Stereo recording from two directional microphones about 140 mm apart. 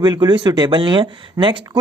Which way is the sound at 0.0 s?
30° right (ahead or behind).